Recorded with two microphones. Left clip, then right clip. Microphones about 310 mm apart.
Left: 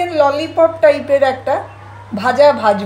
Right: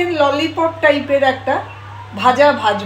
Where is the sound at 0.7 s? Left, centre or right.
Left.